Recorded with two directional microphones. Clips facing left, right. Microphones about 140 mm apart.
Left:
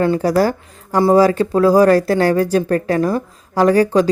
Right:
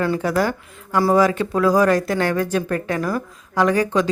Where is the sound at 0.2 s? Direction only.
35° left (ahead or behind).